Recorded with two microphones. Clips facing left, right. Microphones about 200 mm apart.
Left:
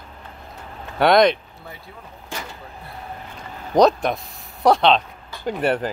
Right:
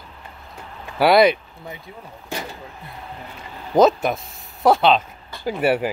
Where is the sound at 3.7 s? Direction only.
5° right (ahead or behind).